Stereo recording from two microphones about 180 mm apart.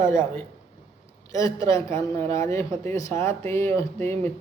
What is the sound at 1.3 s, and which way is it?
A man's voice, 20° left (ahead or behind).